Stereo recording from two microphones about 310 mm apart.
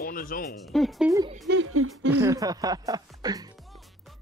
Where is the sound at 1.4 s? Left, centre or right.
Right.